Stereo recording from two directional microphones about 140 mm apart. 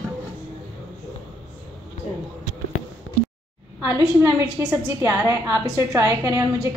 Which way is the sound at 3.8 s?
20° right (ahead or behind).